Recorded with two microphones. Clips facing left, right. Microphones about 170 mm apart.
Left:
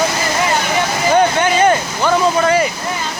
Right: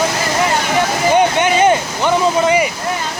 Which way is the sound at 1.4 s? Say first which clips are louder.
Right 1 dB; 20° right (ahead or behind).